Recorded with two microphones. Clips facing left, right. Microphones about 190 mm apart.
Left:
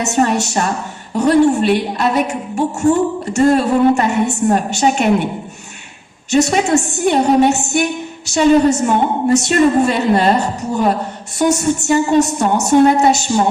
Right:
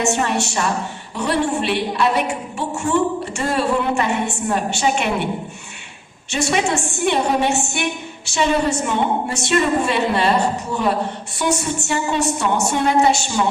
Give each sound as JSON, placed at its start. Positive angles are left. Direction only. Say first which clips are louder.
{"t": 0.0, "sound": "a woman's voice", "louder": "left 4 dB", "side_deg": 40}
{"t": 6.3, "sound": "a woman's voice", "louder": "left 7 dB", "side_deg": 40}
{"t": 11.3, "sound": "a woman's voice", "louder": "left 7 dB", "side_deg": 45}